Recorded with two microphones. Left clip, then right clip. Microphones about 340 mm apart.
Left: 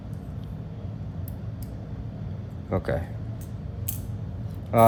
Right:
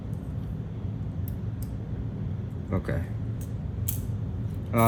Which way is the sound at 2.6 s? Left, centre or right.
Left.